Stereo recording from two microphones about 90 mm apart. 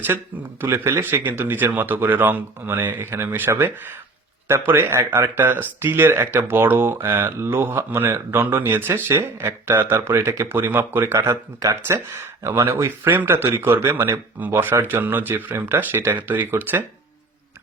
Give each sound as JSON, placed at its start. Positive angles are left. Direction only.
{"t": 0.6, "sound": "speech", "side_deg": -30}